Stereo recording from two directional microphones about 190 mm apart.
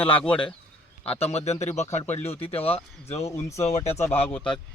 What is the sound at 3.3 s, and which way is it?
Speech, 15° left (ahead or behind).